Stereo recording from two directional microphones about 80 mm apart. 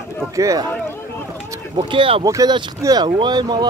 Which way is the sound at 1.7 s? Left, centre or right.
Right.